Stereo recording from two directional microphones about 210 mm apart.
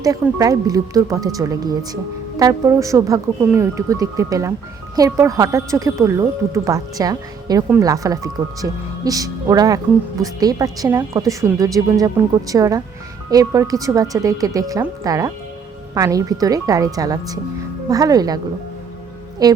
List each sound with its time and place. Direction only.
0.0 s a woman's voice: 15° right (ahead or behind)
19.4 s a woman's voice: 15° right (ahead or behind)